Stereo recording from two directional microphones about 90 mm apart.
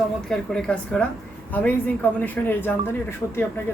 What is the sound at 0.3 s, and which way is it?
Speech, 10° left (ahead or behind).